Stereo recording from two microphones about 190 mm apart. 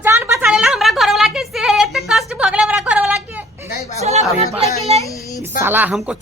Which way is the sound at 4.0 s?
35° right (ahead or behind).